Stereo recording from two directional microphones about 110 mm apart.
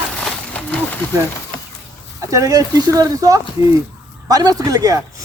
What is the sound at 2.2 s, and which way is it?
Speech, 30° right (ahead or behind).